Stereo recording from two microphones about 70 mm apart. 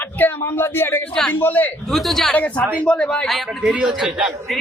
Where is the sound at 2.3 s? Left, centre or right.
Left.